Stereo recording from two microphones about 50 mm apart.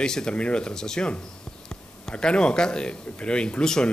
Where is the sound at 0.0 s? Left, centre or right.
Centre.